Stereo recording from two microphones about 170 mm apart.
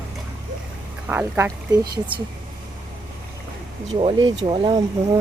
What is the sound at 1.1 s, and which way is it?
Speech, 15° right (ahead or behind).